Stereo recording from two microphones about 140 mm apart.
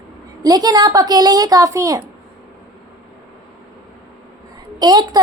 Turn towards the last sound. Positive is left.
turn(degrees=-30)  # may be behind; listen again after turning